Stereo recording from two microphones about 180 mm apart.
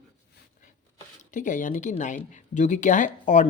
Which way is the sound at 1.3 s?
45° left (ahead or behind).